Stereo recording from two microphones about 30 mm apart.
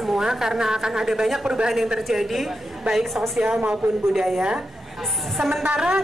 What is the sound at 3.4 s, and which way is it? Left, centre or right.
Speech, right.